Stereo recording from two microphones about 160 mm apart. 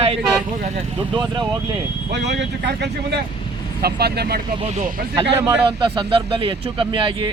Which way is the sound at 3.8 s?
80° right.